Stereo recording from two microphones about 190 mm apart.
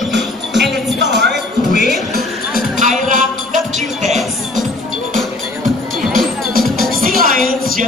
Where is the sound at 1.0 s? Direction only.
65° right (ahead or behind).